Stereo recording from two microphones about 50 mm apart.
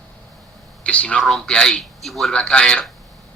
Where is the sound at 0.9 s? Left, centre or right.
Left.